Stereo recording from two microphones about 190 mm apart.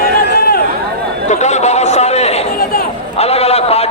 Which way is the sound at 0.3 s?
55° left (ahead or behind).